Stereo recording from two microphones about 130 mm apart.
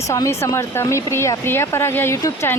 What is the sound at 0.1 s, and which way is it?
Speech, 20° left (ahead or behind).